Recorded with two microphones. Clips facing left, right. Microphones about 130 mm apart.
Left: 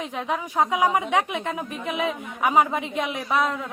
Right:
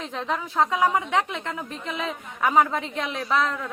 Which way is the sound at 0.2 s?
15° left (ahead or behind).